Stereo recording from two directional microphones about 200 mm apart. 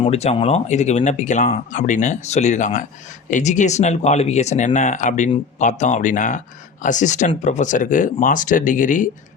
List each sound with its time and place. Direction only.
0.0 s speech: 30° left (ahead or behind)